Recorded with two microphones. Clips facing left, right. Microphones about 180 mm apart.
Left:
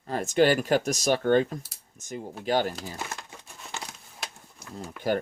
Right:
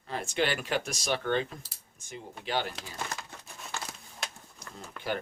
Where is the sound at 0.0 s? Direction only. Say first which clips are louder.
Left 8 dB; 40° left (ahead or behind).